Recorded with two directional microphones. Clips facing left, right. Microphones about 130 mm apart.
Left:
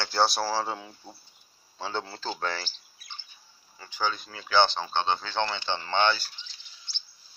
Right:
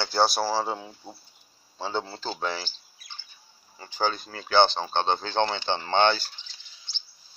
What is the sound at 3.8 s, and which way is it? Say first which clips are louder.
Speech: right 3 dB; 35° right (ahead or behind).